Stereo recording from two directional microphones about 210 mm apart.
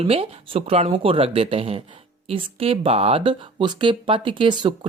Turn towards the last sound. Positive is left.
turn(degrees=-20)  # may be behind; listen again after turning